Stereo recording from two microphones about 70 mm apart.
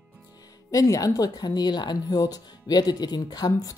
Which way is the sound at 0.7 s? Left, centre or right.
Left.